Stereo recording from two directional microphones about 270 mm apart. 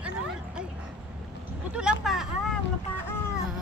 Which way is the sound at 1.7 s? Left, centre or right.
Centre.